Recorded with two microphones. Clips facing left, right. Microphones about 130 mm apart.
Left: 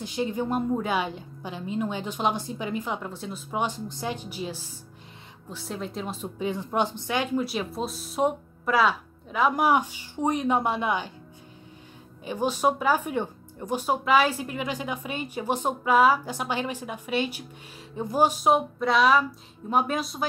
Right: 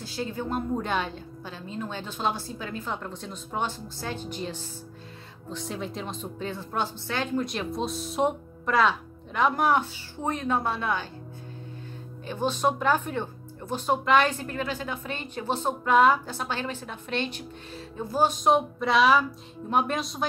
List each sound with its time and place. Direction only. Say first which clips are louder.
0.0 s a woman's voice: left 4 dB; 20° left (ahead or behind)
12.3 s a woman's voice: left 1 dB; 10° left (ahead or behind)